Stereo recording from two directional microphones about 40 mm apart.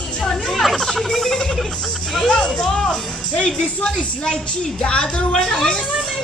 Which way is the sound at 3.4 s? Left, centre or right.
Centre.